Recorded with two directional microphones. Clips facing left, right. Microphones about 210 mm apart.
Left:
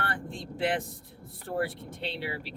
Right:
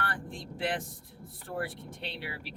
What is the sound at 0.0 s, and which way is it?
Vehicle, 25° left (ahead or behind).